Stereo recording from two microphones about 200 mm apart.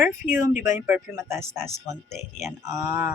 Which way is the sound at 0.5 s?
40° left (ahead or behind).